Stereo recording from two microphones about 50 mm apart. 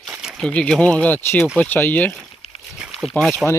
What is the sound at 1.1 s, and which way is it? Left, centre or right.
Speech, left.